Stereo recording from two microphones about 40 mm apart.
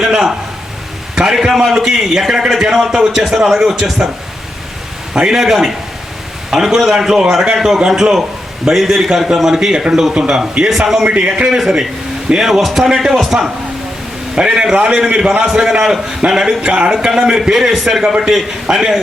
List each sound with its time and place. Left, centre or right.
0.0 s a man's voice: centre
5.3 s a man's voice: centre
10.7 s a man's voice: centre
11.0 s a man's voice: right
12.4 s a man's voice: centre
12.9 s a man's voice: centre
15.4 s a man's voice: centre